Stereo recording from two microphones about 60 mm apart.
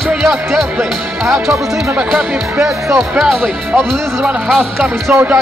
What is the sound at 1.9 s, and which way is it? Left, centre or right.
Speech, right.